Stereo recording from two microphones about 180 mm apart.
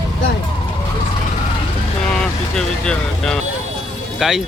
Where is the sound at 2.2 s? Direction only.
5° left (ahead or behind).